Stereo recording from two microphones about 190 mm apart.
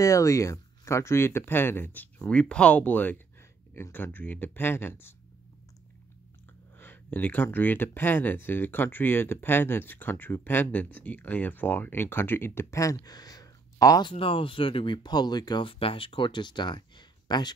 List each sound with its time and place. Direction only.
0.0 s speech: 15° left (ahead or behind)
6.8 s speech: 10° left (ahead or behind)